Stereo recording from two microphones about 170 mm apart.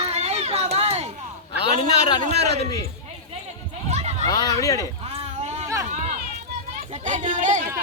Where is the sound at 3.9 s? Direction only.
40° right (ahead or behind).